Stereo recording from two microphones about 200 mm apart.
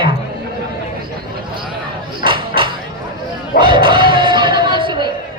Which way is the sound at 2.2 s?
25° right (ahead or behind).